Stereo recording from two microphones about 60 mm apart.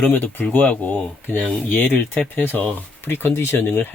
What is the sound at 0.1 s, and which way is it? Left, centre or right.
Speech, left.